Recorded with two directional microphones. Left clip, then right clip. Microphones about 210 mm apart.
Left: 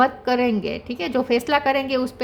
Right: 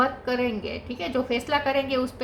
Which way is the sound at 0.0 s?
50° left (ahead or behind).